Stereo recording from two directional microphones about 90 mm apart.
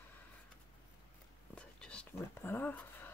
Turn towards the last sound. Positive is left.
turn(degrees=20)  # may be behind; listen again after turning